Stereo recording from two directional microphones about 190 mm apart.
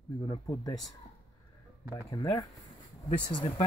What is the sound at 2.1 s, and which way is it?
Speech, 20° left (ahead or behind).